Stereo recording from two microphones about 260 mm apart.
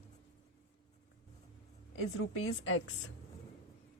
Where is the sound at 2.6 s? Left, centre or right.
Left.